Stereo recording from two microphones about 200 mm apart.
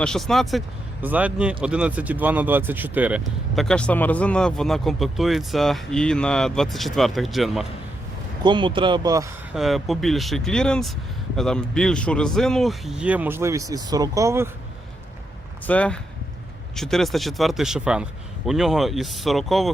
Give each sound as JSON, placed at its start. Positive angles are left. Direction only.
{"t": 0.0, "sound": "speech", "side_deg": 0}
{"t": 8.4, "sound": "speech", "side_deg": -25}
{"t": 9.6, "sound": "speech", "side_deg": 0}
{"t": 15.6, "sound": "speech", "side_deg": 5}